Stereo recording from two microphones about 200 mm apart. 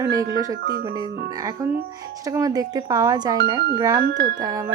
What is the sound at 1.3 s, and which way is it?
Speech, 15° right (ahead or behind).